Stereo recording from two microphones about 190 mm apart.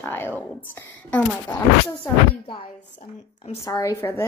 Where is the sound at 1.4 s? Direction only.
20° left (ahead or behind).